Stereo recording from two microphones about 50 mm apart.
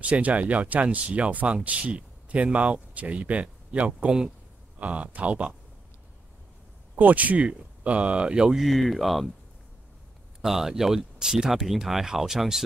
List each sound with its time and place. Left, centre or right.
0.0 s speech: right
7.0 s speech: right
8.5 s speech: centre
10.4 s speech: centre